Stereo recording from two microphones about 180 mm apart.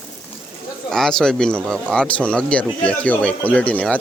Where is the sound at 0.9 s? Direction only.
5° left (ahead or behind).